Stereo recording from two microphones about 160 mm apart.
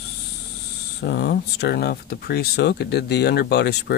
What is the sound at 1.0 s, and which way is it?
Speech, 90° left.